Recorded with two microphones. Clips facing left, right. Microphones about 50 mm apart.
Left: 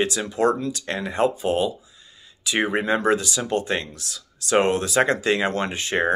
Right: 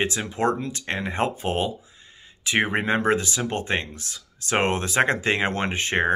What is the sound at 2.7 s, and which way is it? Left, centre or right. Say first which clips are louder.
Speech: left 1 dB; right.